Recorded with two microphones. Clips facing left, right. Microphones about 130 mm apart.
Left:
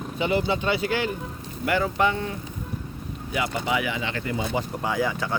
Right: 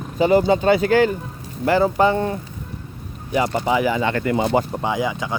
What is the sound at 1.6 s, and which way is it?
Speech, 35° right (ahead or behind).